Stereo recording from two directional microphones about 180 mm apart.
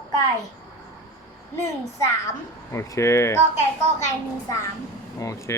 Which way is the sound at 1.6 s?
15° left (ahead or behind).